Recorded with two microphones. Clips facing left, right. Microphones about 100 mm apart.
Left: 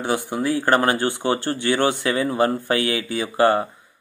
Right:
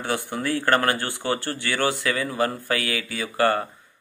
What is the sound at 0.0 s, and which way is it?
Speech, 15° left (ahead or behind).